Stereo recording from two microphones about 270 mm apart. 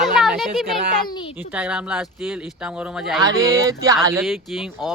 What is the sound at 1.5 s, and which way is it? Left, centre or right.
Speech, centre.